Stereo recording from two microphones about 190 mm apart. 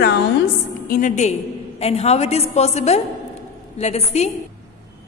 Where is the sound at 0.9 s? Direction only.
45° left (ahead or behind).